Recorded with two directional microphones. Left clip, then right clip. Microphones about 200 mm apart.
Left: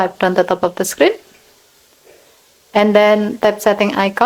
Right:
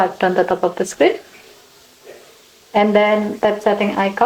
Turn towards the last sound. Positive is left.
turn(degrees=35)  # may be behind; listen again after turning